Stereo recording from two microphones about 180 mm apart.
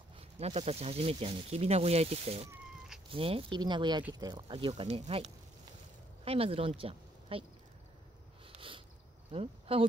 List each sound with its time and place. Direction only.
0.1 s speech: 35° right (ahead or behind)
6.2 s speech: 35° right (ahead or behind)
8.5 s a sound: 30° right (ahead or behind)
9.3 s speech: 30° right (ahead or behind)